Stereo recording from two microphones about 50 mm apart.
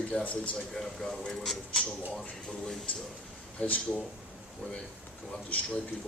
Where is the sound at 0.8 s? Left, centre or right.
Centre.